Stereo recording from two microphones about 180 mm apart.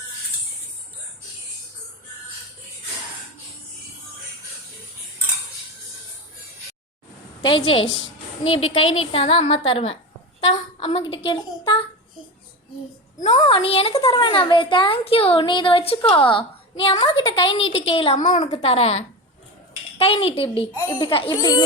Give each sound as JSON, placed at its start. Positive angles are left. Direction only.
{"t": 7.4, "sound": "a child's voice", "side_deg": 30}
{"t": 13.2, "sound": "a child's voice", "side_deg": 35}